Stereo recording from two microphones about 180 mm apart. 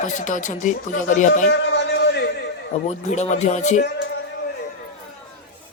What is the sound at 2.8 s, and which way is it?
Speech, 40° left (ahead or behind).